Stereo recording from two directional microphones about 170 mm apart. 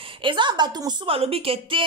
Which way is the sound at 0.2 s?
30° right (ahead or behind).